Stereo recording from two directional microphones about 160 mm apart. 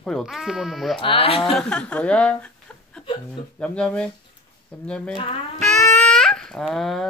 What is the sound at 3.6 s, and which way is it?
Speech, 5° left (ahead or behind).